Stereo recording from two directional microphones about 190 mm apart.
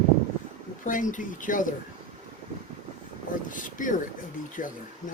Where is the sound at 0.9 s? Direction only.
45° left (ahead or behind).